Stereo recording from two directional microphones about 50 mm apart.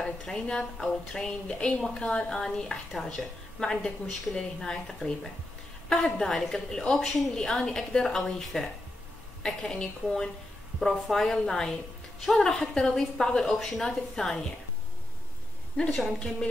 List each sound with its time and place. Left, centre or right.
0.0 s a woman's voice: centre
15.9 s a woman's voice: centre